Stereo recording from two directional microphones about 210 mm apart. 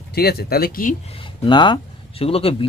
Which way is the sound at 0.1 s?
50° left (ahead or behind).